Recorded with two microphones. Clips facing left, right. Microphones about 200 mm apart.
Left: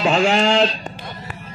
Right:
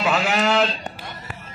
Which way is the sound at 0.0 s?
30° left (ahead or behind).